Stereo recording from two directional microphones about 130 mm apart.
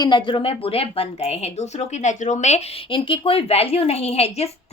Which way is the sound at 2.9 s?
45° left (ahead or behind).